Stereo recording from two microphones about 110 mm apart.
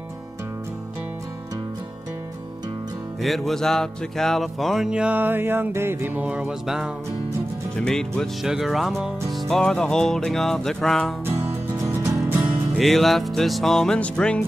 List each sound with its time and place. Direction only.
3.2 s music: centre (ahead or behind)
7.7 s music: 5° left (ahead or behind)
11.8 s music: 25° right (ahead or behind)
12.7 s music: centre (ahead or behind)